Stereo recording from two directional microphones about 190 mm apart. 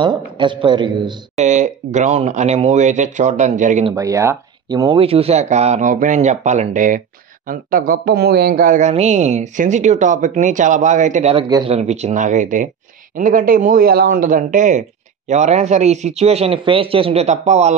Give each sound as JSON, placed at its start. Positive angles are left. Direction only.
{"t": 0.0, "sound": "speech", "side_deg": -25}
{"t": 1.4, "sound": "speech", "side_deg": -40}
{"t": 3.9, "sound": "speech", "side_deg": -15}
{"t": 11.4, "sound": "speech", "side_deg": -20}
{"t": 11.7, "sound": "speech", "side_deg": -35}